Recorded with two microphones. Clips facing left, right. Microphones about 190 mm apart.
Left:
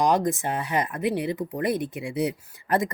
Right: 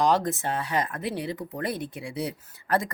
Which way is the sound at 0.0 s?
15° left (ahead or behind).